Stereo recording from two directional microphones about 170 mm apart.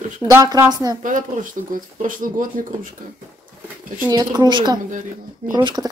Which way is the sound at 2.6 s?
50° right (ahead or behind).